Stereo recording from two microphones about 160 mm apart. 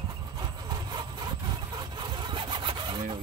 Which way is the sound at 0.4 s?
25° right (ahead or behind).